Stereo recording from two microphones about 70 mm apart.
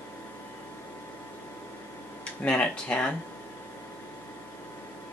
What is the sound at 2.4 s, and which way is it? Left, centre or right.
Speech, centre.